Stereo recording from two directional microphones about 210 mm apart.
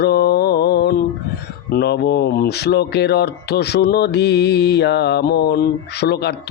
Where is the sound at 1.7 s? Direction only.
50° left (ahead or behind).